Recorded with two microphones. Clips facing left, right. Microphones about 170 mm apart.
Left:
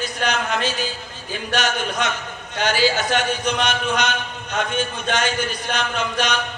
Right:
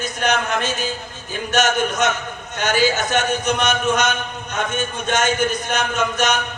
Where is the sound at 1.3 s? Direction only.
45° right (ahead or behind).